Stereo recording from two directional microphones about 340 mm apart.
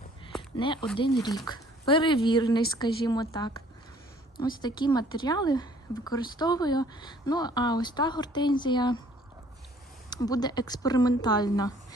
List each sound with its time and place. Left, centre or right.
0.5 s a woman's voice: centre
10.1 s a woman's voice: centre